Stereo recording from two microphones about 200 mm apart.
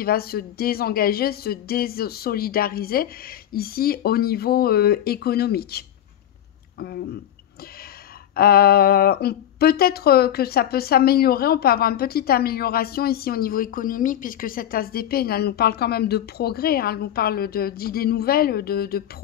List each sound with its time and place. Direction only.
0.0 s speech: 50° left (ahead or behind)
8.4 s speech: 50° left (ahead or behind)